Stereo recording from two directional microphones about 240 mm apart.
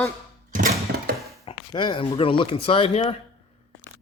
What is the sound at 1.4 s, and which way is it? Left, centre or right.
Speech, centre.